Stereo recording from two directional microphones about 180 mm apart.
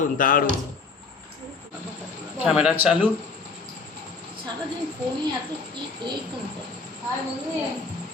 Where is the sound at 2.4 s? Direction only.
5° right (ahead or behind).